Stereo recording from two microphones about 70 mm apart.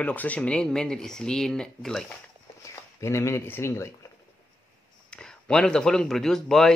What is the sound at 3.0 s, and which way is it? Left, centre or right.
Speech, left.